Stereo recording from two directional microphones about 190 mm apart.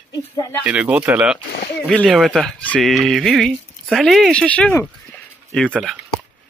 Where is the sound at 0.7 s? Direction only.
5° right (ahead or behind).